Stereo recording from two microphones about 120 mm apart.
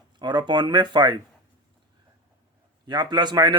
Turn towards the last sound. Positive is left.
turn(degrees=-35)  # may be behind; listen again after turning